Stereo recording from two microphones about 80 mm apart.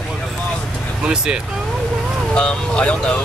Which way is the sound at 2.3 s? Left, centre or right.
Centre.